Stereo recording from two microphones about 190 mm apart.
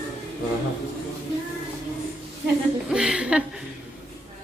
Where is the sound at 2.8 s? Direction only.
5° right (ahead or behind).